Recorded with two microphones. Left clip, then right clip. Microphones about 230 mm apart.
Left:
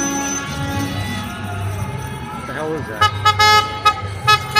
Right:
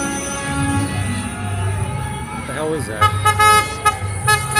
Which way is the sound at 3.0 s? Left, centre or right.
Left.